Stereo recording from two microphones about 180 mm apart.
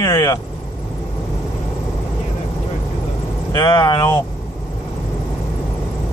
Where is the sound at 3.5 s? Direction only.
25° left (ahead or behind).